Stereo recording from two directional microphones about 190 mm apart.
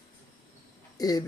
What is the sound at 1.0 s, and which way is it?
Speech, 20° left (ahead or behind).